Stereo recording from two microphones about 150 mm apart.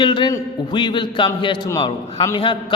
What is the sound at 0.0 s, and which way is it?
A man's voice, 30° left (ahead or behind).